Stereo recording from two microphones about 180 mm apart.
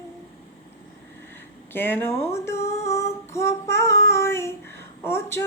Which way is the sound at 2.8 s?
15° left (ahead or behind).